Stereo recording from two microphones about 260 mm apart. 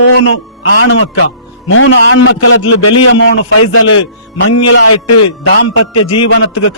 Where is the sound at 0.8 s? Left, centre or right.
Left.